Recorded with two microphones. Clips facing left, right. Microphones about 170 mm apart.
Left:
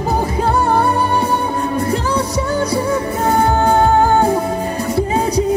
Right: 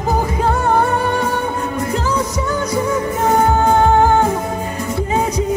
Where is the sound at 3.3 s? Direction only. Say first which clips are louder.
Even; 35° left (ahead or behind).